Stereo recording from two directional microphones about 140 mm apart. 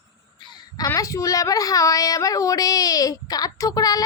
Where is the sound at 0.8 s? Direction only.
25° left (ahead or behind).